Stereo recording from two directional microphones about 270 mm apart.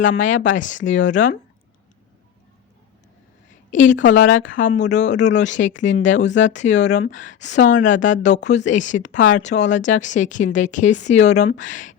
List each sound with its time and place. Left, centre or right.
0.2 s speech: left
3.7 s a woman's voice: left